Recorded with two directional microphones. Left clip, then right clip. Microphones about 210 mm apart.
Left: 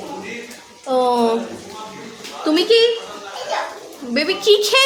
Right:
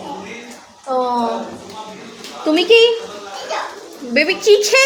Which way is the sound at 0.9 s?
35° left (ahead or behind).